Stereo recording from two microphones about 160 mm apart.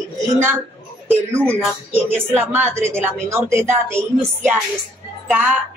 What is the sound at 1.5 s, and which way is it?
A woman's voice, 15° right (ahead or behind).